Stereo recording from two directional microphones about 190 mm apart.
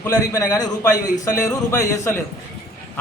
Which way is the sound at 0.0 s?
15° left (ahead or behind).